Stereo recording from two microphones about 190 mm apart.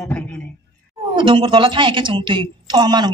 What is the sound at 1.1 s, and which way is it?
A woman's voice, 25° right (ahead or behind).